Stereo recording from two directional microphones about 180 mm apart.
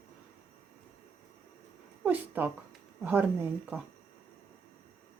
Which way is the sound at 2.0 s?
10° right (ahead or behind).